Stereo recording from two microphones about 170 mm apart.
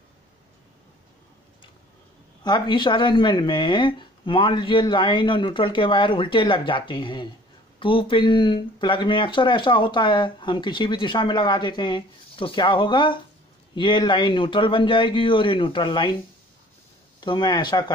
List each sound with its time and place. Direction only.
2.4 s speech: 25° left (ahead or behind)
17.2 s speech: 25° left (ahead or behind)